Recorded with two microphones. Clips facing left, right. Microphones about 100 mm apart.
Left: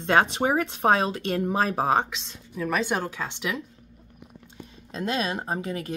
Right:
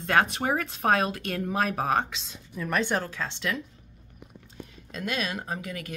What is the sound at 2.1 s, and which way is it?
A woman's voice, centre (ahead or behind).